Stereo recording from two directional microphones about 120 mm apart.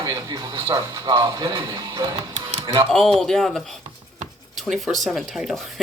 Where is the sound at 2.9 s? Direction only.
5° left (ahead or behind).